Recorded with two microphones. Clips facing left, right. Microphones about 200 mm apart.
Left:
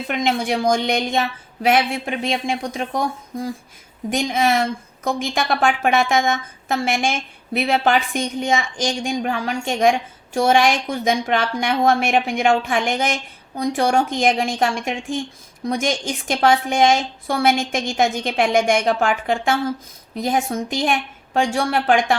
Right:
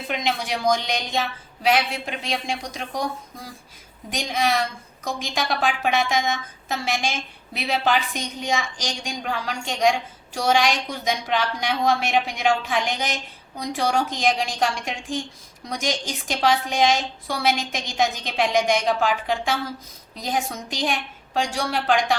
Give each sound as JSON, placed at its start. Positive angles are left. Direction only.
{"t": 0.1, "sound": "a woman's voice", "side_deg": 50}